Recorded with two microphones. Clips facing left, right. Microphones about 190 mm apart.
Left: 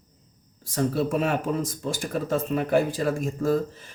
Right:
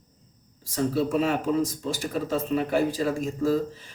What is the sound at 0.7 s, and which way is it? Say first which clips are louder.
Speech: even; 55° left (ahead or behind).